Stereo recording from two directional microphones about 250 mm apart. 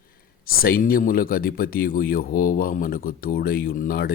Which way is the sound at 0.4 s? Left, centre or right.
Left.